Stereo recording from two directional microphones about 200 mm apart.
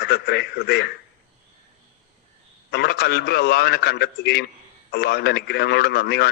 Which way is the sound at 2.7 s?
55° left (ahead or behind).